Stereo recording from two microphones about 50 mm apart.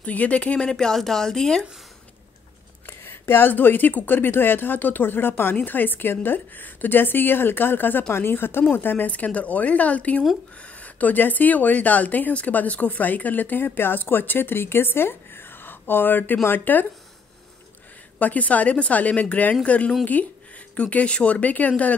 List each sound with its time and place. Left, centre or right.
0.0 s speech: left; by 1.7 s centre
2.9 s a woman's voice: left
18.2 s speech: left